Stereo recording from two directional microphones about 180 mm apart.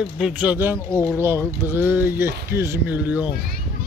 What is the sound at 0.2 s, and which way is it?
Speech, 5° right (ahead or behind).